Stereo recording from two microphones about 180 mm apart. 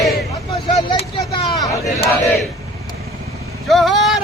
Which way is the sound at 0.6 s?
30° left (ahead or behind).